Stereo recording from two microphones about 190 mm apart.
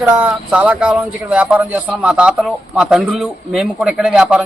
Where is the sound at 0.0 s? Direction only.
5° right (ahead or behind).